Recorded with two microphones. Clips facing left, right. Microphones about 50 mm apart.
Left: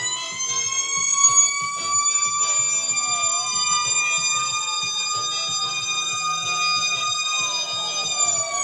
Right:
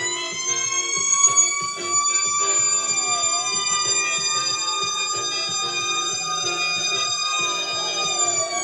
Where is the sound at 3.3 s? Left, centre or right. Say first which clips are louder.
Right 1 dB; right.